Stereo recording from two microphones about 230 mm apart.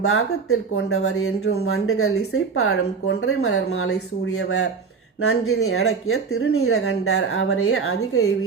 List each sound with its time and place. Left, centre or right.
0.0 s speech: left